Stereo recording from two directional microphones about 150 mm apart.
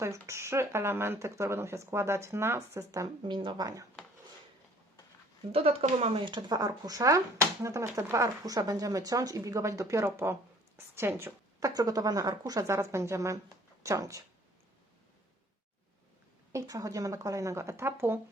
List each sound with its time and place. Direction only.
0.0 s speech: 20° right (ahead or behind)
5.5 s speech: 40° right (ahead or behind); by 14.3 s 20° right (ahead or behind)
16.5 s speech: 20° right (ahead or behind)